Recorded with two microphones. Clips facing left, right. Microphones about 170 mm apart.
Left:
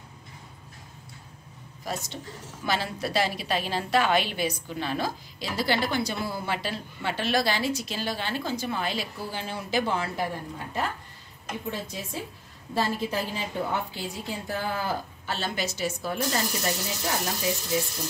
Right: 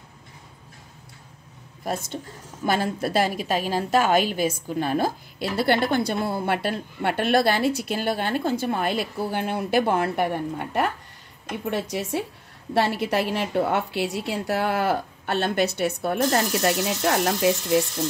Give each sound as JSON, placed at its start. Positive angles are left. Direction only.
{"t": 1.9, "sound": "a woman's voice", "side_deg": -55}